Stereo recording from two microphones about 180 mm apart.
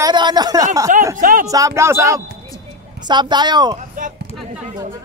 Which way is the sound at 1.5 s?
20° right (ahead or behind).